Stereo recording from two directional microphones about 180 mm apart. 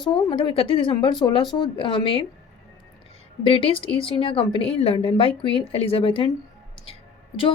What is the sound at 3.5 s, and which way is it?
A woman's voice, 30° left (ahead or behind).